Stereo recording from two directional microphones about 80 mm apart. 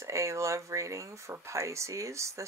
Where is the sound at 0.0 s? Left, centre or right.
Right.